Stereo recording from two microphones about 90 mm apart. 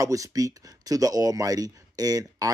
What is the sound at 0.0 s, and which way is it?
Speech, 40° right (ahead or behind).